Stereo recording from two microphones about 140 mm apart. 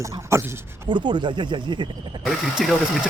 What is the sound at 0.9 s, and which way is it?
Speech, 35° right (ahead or behind).